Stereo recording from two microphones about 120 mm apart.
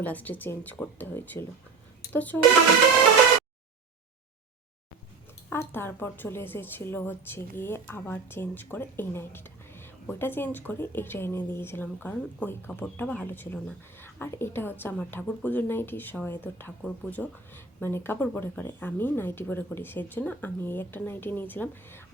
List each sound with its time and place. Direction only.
0.0 s speech: 15° left (ahead or behind)
5.5 s speech: 20° left (ahead or behind)